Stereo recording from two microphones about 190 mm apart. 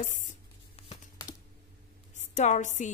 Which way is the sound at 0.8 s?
30° left (ahead or behind).